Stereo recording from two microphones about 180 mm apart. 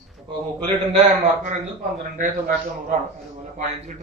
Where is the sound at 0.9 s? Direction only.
40° right (ahead or behind).